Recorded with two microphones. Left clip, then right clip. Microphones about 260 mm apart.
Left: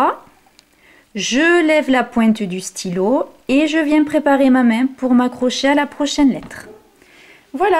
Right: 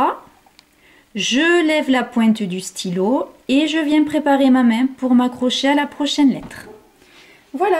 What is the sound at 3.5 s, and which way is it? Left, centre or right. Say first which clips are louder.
Speech: left 2 dB; centre.